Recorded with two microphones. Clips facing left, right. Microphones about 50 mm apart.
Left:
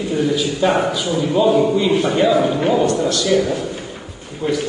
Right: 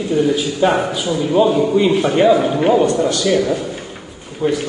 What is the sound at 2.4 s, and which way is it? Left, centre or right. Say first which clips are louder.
Speech: even; centre.